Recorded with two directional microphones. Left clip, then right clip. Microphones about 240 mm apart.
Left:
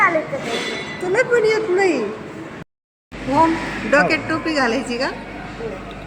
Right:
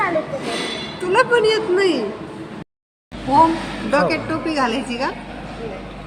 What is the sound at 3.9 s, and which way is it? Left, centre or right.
A woman's voice, centre.